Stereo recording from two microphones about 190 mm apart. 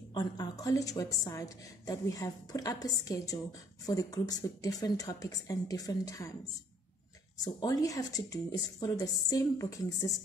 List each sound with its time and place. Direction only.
0.1 s a woman's voice: 20° left (ahead or behind)
7.4 s a woman's voice: 20° left (ahead or behind)